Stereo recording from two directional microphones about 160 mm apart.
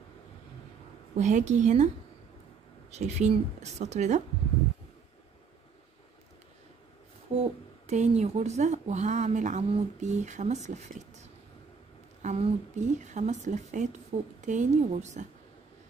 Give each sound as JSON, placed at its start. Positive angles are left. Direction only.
{"t": 1.1, "sound": "a woman's voice", "side_deg": -45}
{"t": 2.9, "sound": "a woman's voice", "side_deg": -45}
{"t": 7.3, "sound": "a sound", "side_deg": -40}
{"t": 7.9, "sound": "a woman's voice", "side_deg": -45}